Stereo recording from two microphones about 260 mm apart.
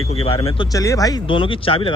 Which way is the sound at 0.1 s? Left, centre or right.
Left.